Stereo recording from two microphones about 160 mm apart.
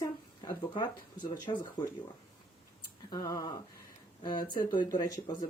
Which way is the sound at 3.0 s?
20° left (ahead or behind).